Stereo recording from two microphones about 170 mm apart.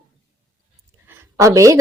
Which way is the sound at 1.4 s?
15° right (ahead or behind).